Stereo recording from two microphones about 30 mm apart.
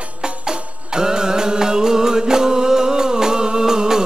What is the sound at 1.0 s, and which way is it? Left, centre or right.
Music, right.